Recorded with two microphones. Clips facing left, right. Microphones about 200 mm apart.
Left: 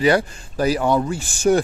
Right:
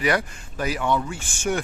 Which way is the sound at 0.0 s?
30° left (ahead or behind).